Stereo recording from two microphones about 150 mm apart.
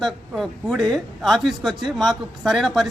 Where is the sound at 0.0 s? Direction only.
Centre (ahead or behind).